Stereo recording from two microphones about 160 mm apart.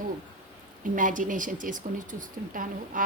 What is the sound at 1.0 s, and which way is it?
A woman's voice, 55° right (ahead or behind).